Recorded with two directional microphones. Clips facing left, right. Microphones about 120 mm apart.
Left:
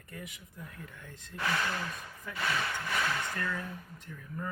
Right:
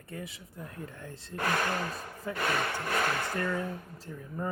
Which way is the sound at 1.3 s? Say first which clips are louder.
Right 3 dB; 50° right (ahead or behind).